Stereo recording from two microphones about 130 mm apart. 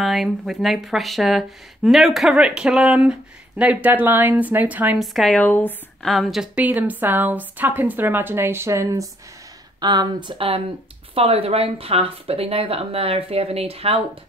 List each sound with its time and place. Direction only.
0.0 s speech: centre (ahead or behind)
4.9 s speech: centre (ahead or behind)
5.4 s speech: 15° left (ahead or behind)
6.0 s speech: centre (ahead or behind); by 14.0 s 50° right (ahead or behind)